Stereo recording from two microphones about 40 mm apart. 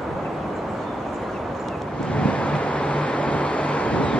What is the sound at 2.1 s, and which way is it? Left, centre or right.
Vehicle, left.